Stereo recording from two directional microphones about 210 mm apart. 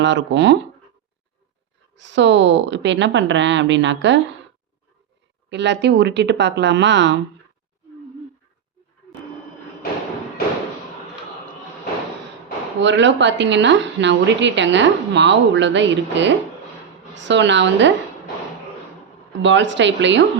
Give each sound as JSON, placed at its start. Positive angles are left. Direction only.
{"t": 0.0, "sound": "a woman's voice", "side_deg": -60}
{"t": 2.0, "sound": "a woman's voice", "side_deg": -60}
{"t": 5.5, "sound": "a woman's voice", "side_deg": -55}
{"t": 12.8, "sound": "a woman's voice", "side_deg": -60}
{"t": 19.4, "sound": "a woman's voice", "side_deg": -60}